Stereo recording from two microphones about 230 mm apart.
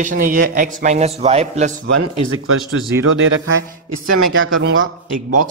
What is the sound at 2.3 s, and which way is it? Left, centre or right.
Speech, right.